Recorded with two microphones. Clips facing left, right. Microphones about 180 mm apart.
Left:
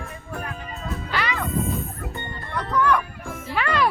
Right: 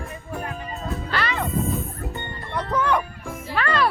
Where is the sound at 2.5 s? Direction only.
20° right (ahead or behind).